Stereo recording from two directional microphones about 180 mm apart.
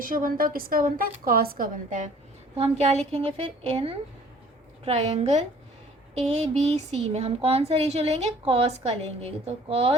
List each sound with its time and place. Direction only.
0.0 s a woman's voice: 50° right (ahead or behind)
2.6 s speech: 40° right (ahead or behind)